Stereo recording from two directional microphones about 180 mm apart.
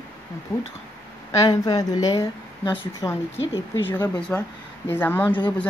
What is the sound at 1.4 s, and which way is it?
A woman's voice, 20° left (ahead or behind).